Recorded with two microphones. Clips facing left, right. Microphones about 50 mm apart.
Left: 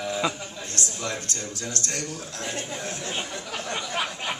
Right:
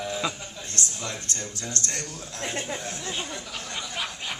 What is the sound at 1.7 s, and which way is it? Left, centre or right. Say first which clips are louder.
Speech: left 1 dB; right.